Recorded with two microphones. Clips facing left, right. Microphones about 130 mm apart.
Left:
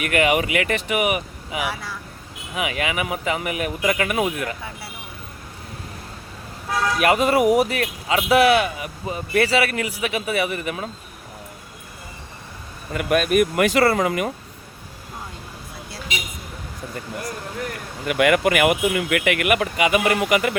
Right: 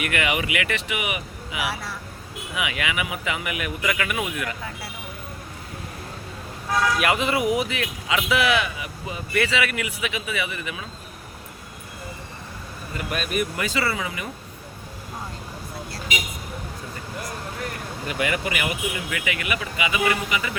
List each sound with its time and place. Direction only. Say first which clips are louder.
0.0 s speech: left 6 dB; 45° left (ahead or behind)
7.0 s speech: left 5 dB; 40° left (ahead or behind)
12.9 s speech: left 9 dB; 55° left (ahead or behind)
18.1 s speech: left 9 dB; 60° left (ahead or behind)